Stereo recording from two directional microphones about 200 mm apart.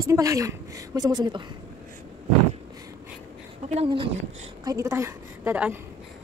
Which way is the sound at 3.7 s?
25° right (ahead or behind).